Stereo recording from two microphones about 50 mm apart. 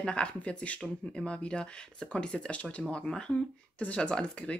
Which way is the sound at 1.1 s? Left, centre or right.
Centre.